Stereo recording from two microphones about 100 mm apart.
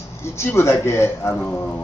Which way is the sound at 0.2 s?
25° left (ahead or behind).